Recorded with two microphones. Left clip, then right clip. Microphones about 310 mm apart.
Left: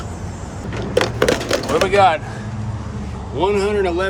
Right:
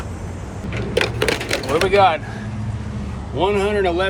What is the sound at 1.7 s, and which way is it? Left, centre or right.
Speech, centre.